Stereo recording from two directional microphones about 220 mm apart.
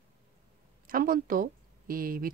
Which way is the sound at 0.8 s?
40° right (ahead or behind).